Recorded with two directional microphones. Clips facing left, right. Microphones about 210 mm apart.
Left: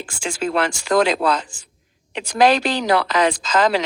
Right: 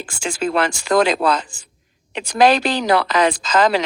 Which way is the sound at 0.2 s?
55° right (ahead or behind).